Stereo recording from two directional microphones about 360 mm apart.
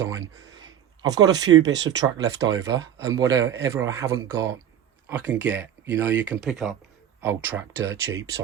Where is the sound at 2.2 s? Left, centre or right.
Centre.